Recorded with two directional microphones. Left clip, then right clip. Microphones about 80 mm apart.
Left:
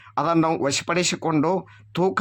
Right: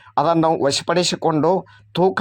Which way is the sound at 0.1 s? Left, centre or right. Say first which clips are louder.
Right 4 dB; right.